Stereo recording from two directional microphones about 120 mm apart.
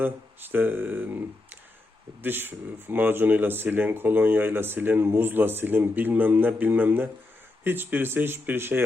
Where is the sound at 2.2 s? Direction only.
15° right (ahead or behind).